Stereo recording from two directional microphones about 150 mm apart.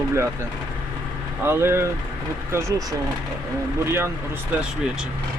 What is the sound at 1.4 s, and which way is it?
Speech, 15° right (ahead or behind).